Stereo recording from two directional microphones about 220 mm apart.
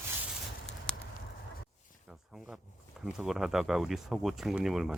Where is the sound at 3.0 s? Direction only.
Centre (ahead or behind).